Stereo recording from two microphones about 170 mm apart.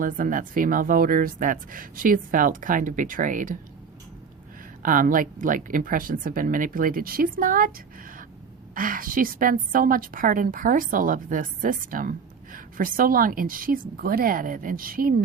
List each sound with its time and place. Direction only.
0.0 s speech: 55° right (ahead or behind)
4.8 s speech: 50° right (ahead or behind)
8.7 s a woman's voice: 55° right (ahead or behind)